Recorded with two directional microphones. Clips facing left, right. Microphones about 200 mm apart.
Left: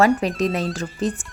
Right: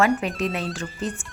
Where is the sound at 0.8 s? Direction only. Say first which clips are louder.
Left 5 dB; 90° left.